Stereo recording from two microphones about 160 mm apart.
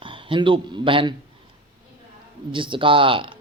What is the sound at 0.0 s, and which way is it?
Speech, 30° right (ahead or behind).